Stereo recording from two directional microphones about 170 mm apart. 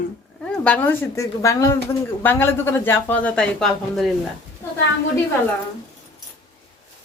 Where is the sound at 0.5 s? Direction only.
5° left (ahead or behind).